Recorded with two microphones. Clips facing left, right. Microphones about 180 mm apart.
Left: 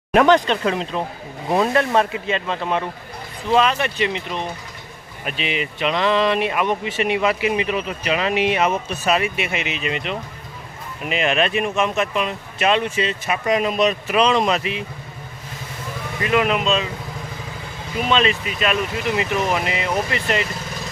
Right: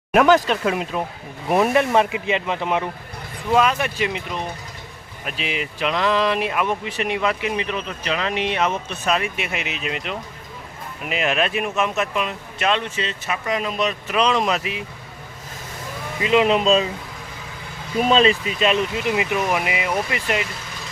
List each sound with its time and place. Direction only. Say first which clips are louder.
0.1 s speech: left 1 dB; 5° right (ahead or behind); by 13.9 s 15° left (ahead or behind)
14.1 s speech: right 1 dB; centre (ahead or behind)
16.2 s speech: right 2 dB; 20° right (ahead or behind)
18.1 s speech: right 2 dB; 35° right (ahead or behind)
19.1 s speech: left 2 dB; 15° right (ahead or behind)